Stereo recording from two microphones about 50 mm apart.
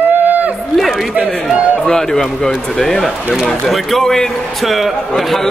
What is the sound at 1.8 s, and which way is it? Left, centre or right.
A man's voice, centre.